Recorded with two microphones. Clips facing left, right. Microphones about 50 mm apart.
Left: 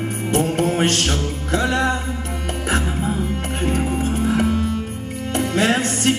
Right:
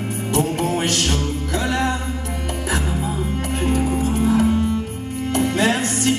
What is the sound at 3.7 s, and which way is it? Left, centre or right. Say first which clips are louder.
Music: right 1 dB; left.